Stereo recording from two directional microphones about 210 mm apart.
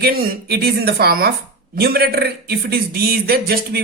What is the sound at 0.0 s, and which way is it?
Speech, 45° right (ahead or behind).